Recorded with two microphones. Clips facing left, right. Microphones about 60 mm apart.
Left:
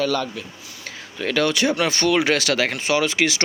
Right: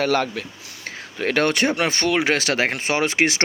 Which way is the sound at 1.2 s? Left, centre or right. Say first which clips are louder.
Right 1 dB; right.